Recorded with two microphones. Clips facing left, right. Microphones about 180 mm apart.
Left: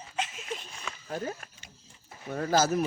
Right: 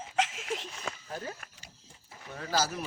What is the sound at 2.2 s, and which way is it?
Speech, 50° left (ahead or behind).